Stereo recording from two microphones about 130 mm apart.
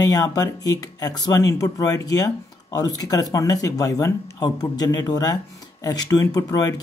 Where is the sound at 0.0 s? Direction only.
30° left (ahead or behind).